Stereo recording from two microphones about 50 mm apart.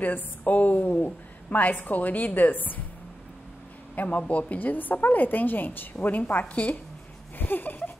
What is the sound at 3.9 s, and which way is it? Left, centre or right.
A woman's voice, left.